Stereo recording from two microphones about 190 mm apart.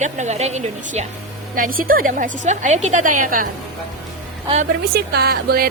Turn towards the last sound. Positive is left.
turn(degrees=-55)  # may be behind; listen again after turning